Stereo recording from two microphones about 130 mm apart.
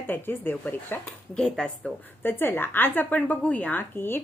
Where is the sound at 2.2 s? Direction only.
15° left (ahead or behind).